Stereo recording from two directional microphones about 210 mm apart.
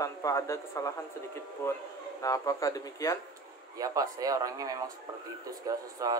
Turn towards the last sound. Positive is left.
turn(degrees=-15)  # may be behind; listen again after turning